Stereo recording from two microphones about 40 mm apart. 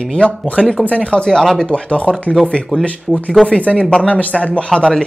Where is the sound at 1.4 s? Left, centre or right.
Centre.